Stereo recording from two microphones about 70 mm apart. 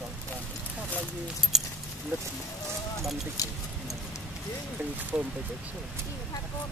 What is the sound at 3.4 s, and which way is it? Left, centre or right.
Speech, left.